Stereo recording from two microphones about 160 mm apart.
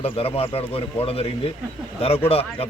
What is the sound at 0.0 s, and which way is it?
A man's voice, 35° left (ahead or behind).